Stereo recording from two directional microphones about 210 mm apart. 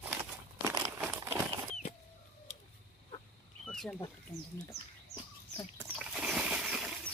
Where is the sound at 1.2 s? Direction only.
15° right (ahead or behind).